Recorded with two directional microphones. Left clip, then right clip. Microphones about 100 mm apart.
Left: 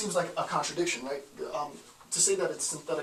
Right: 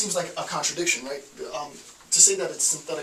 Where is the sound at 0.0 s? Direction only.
Centre (ahead or behind).